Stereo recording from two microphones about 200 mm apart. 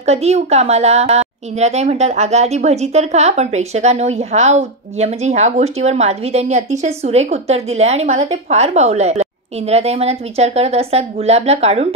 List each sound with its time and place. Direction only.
0.0 s a woman's voice: 30° right (ahead or behind)